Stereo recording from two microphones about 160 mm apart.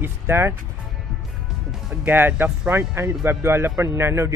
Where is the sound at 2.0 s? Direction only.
15° right (ahead or behind).